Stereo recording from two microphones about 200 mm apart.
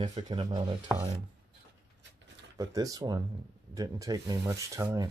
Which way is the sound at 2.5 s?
15° right (ahead or behind).